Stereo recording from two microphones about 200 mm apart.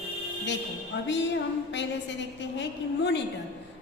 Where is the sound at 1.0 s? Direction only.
60° left (ahead or behind).